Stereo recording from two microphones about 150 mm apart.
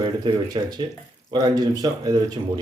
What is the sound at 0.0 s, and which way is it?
Speech, 30° right (ahead or behind).